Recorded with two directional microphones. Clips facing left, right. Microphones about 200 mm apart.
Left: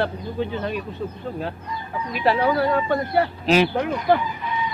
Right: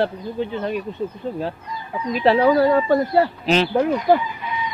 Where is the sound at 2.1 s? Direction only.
30° right (ahead or behind).